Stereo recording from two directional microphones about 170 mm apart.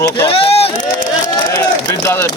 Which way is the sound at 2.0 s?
15° left (ahead or behind).